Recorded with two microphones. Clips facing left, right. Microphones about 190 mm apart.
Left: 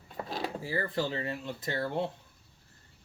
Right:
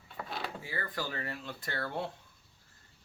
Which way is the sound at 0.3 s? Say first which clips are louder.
Left 6 dB; 35° left (ahead or behind).